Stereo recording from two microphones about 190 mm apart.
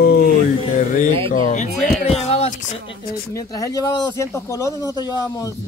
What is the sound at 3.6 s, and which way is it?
Speech, 20° left (ahead or behind).